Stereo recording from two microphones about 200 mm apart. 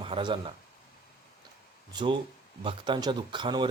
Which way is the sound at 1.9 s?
25° right (ahead or behind).